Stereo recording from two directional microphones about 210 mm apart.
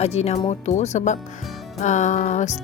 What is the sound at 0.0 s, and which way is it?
Speech, 30° left (ahead or behind).